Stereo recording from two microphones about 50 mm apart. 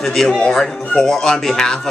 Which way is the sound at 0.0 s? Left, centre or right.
Centre.